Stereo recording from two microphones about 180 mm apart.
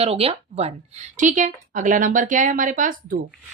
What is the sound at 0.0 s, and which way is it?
A woman's voice, 35° right (ahead or behind).